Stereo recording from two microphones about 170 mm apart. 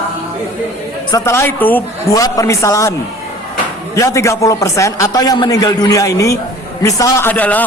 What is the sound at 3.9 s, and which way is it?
A man's voice, 20° left (ahead or behind).